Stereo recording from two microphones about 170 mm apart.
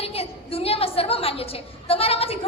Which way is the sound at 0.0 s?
35° left (ahead or behind).